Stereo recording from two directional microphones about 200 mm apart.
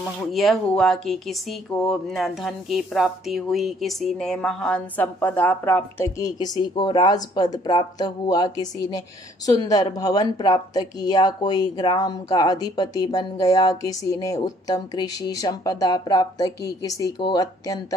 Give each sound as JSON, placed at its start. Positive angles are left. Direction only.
{"t": 0.0, "sound": "speech", "side_deg": 0}